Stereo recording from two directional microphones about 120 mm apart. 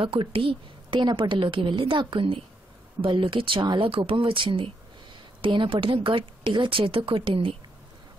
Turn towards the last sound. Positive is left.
turn(degrees=-50)  # may be behind; listen again after turning